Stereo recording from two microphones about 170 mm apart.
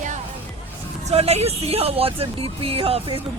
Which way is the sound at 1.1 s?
35° right (ahead or behind).